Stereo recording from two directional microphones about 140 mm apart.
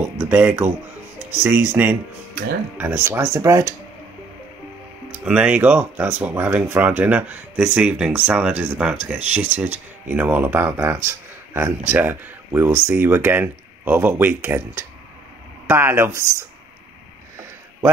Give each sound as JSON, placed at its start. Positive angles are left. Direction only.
{"t": 0.2, "sound": "speech", "side_deg": -10}
{"t": 5.2, "sound": "speech", "side_deg": -10}